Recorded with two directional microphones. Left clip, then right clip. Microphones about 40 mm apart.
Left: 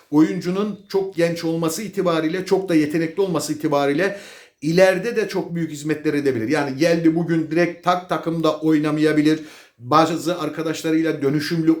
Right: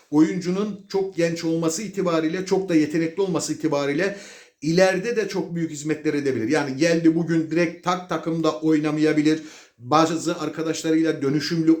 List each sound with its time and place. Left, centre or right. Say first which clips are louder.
0.1 s speech: left 2 dB; left
6.5 s a man's voice: left 1 dB; centre
7.5 s speech: left 6 dB; left
8.1 s speech: left 3 dB; left
9.9 s a man's voice: left 3 dB; centre
11.3 s a man's voice: left 1 dB; left